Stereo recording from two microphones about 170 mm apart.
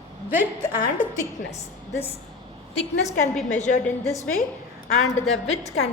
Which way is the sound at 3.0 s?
45° left (ahead or behind).